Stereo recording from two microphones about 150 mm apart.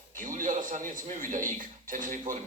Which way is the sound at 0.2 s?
60° right (ahead or behind).